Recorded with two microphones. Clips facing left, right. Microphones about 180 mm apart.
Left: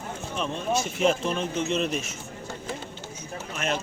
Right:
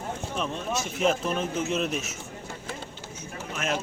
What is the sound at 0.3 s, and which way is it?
Speech, centre (ahead or behind).